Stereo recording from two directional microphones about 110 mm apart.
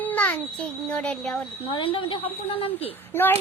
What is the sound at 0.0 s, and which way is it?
A child's voice, 15° left (ahead or behind).